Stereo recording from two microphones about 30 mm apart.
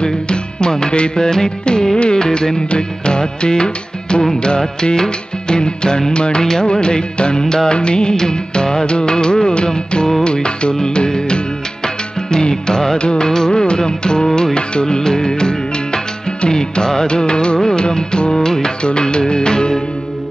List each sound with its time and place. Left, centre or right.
0.0 s music: left
8.1 s music: centre
10.2 s music: left
13.3 s music: left
18.8 s music: left